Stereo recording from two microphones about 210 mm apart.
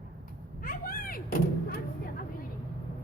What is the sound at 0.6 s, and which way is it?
Door, 45° left (ahead or behind).